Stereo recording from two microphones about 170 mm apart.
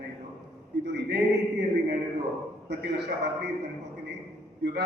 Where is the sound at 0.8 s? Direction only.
85° right.